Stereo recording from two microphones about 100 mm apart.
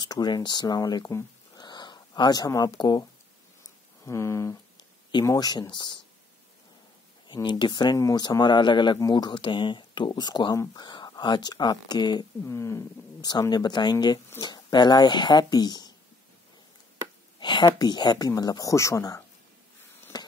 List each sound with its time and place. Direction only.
0.0 s speech: 45° left (ahead or behind)
1.6 s a sound: 50° left (ahead or behind)
4.0 s speech: 30° left (ahead or behind)
5.2 s speech: 40° left (ahead or behind)
7.4 s speech: 50° left (ahead or behind)
8.0 s speech: 40° left (ahead or behind)
12.4 s speech: 30° left (ahead or behind)
13.2 s speech: 45° left (ahead or behind)
17.4 s speech: 50° left (ahead or behind); by 19.2 s 30° left (ahead or behind)
20.1 s a sound: 45° left (ahead or behind)